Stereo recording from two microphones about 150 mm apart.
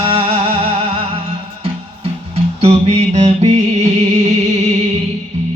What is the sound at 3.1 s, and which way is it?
Music, 45° right (ahead or behind).